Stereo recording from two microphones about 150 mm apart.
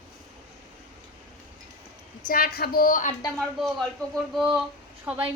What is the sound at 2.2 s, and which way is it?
Speech, 85° left.